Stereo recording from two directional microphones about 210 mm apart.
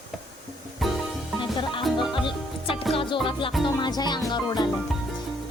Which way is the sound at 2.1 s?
25° left (ahead or behind).